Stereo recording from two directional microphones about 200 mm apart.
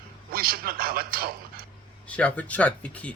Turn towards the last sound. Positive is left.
turn(degrees=5)  # may be behind; listen again after turning